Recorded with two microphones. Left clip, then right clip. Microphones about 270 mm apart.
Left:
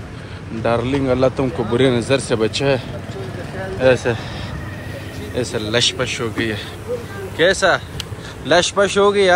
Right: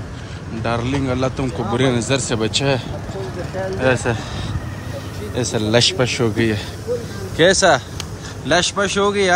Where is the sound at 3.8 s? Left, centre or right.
Centre.